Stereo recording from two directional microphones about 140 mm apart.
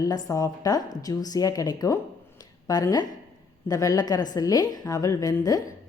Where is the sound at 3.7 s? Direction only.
25° left (ahead or behind).